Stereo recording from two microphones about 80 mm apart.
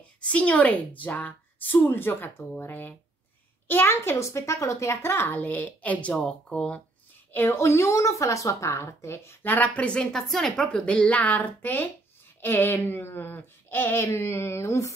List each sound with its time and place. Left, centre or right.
0.2 s a woman's voice: centre
7.3 s a woman's voice: left